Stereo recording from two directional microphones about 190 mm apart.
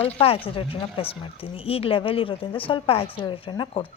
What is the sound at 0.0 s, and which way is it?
Speech, 30° left (ahead or behind).